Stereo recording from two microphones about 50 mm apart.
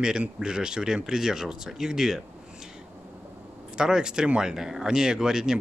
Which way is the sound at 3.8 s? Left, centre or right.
Centre.